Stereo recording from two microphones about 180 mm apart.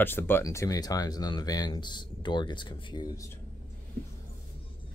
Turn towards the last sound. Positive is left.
turn(degrees=20)  # may be behind; listen again after turning